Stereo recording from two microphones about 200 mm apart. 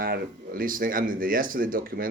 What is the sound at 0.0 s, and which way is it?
Speech, 45° right (ahead or behind).